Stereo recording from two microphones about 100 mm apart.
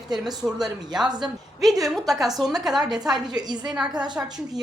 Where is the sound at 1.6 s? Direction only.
Centre (ahead or behind).